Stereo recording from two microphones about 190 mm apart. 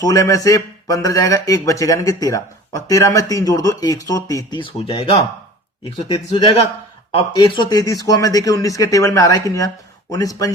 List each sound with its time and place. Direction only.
0.0 s speech: 20° left (ahead or behind)